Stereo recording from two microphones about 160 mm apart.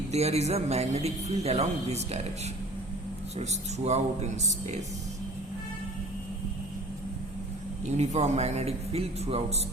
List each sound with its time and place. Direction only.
0.1 s a man's voice: 40° right (ahead or behind)
3.3 s speech: 45° right (ahead or behind)
7.9 s a man's voice: 45° right (ahead or behind)